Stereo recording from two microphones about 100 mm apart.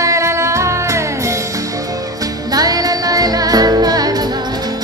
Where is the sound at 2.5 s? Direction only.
40° right (ahead or behind).